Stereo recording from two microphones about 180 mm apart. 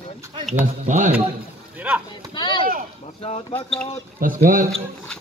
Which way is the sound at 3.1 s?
30° left (ahead or behind).